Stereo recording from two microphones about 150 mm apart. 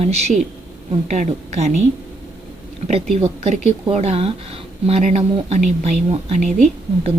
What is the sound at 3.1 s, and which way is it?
Speech, 50° right (ahead or behind).